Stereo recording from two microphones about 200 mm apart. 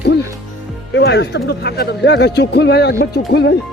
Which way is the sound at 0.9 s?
55° left (ahead or behind).